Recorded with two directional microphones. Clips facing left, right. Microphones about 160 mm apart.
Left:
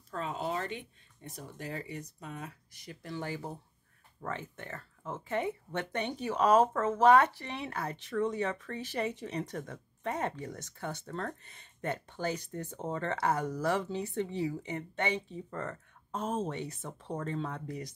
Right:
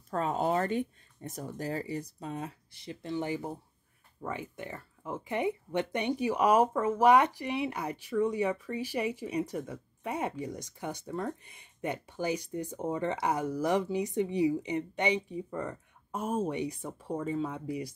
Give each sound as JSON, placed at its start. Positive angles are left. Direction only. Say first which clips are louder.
{"t": 0.1, "sound": "speech", "louder": "right 6 dB", "side_deg": -45}